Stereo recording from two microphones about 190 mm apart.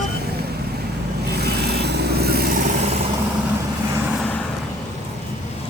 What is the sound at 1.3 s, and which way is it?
Vehicle, 60° right (ahead or behind).